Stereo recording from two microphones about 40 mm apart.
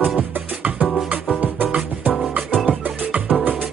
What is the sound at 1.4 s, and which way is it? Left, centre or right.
Music, right.